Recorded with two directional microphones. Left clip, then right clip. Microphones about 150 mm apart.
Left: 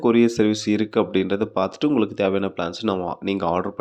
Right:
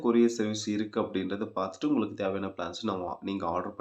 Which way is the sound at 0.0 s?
60° left (ahead or behind).